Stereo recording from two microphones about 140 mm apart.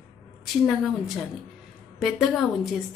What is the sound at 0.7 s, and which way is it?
A woman's voice, centre (ahead or behind).